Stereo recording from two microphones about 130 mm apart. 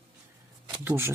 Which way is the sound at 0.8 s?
15° right (ahead or behind).